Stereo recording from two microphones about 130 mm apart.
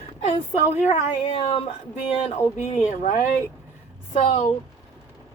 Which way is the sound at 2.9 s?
60° left (ahead or behind).